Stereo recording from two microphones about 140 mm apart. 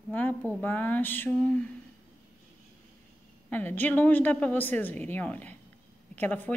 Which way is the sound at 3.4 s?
15° left (ahead or behind).